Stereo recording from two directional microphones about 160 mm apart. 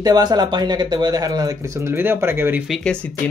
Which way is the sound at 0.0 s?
25° right (ahead or behind).